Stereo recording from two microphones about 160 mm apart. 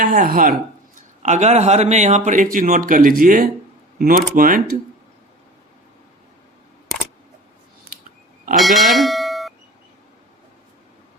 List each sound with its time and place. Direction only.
0.0 s speech: 65° right (ahead or behind)
0.9 s speech: 50° right (ahead or behind)
8.5 s speech: centre (ahead or behind)